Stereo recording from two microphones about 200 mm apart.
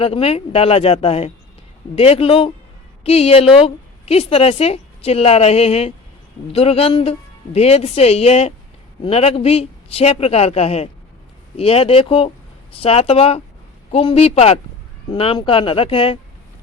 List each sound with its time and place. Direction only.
0.0 s a woman's voice: 30° left (ahead or behind)